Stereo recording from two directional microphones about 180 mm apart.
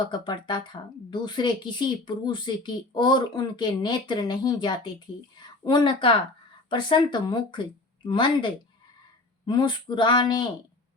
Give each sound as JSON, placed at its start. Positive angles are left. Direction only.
{"t": 0.0, "sound": "a woman's voice", "side_deg": 25}
{"t": 9.5, "sound": "a woman's voice", "side_deg": 25}